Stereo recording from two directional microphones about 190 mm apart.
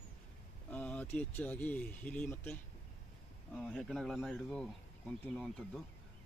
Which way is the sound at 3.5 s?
5° left (ahead or behind).